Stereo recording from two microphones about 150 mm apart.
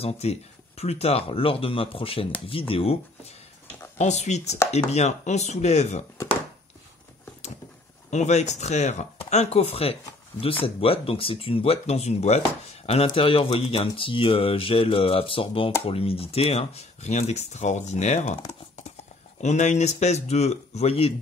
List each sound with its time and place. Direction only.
0.0 s speech: 45° left (ahead or behind)
8.1 s speech: 50° left (ahead or behind)
19.4 s speech: 50° left (ahead or behind)